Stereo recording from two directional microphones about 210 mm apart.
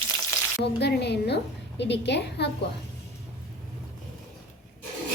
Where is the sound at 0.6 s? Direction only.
50° left (ahead or behind).